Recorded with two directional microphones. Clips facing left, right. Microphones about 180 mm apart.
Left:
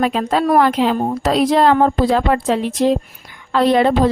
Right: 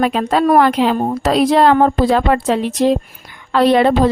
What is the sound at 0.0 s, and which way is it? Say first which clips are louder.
A woman's voice: right 2 dB; 65° right (ahead or behind).